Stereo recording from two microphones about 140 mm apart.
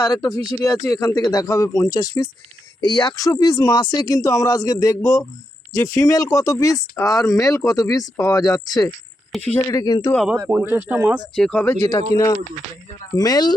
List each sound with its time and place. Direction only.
0.0 s speech: 25° left (ahead or behind)
10.2 s speech: 5° right (ahead or behind)
11.3 s speech: 5° left (ahead or behind)
11.8 s speech: 30° left (ahead or behind)